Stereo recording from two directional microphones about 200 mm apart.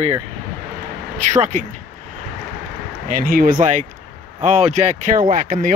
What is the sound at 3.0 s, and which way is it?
Speech, 45° right (ahead or behind).